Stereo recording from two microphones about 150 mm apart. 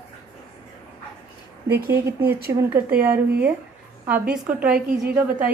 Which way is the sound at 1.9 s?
15° right (ahead or behind).